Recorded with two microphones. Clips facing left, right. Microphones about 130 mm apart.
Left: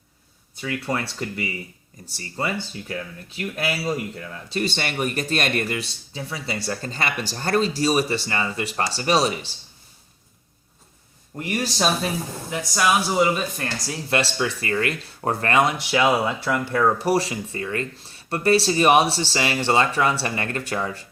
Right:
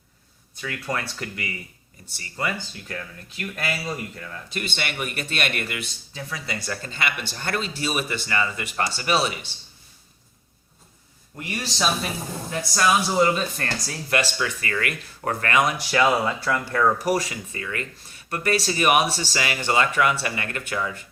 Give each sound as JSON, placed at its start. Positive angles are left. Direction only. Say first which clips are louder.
{"t": 0.8, "sound": "speech", "louder": "left 1 dB", "side_deg": 30}
{"t": 2.9, "sound": "speech", "louder": "left 3 dB", "side_deg": 15}
{"t": 4.4, "sound": "speech", "louder": "left 5 dB", "side_deg": 35}
{"t": 11.3, "sound": "speech", "louder": "left 4 dB", "side_deg": 35}
{"t": 12.5, "sound": "speech", "louder": "even", "side_deg": 10}
{"t": 13.8, "sound": "speech", "louder": "left 2 dB", "side_deg": 25}
{"t": 15.9, "sound": "speech", "louder": "left 1 dB", "side_deg": 15}
{"t": 17.0, "sound": "speech", "louder": "left 2 dB", "side_deg": 30}